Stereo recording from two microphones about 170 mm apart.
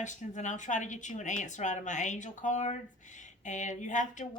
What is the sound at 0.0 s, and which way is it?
A woman's voice, 45° left (ahead or behind).